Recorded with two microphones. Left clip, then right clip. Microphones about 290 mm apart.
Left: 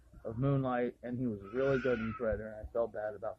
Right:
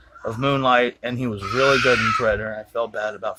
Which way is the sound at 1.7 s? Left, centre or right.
Right.